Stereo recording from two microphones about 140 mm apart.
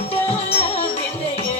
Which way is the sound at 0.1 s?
45° left (ahead or behind).